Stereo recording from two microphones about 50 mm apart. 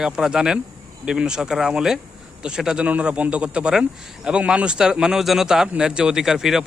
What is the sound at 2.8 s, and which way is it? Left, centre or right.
A man's voice, right.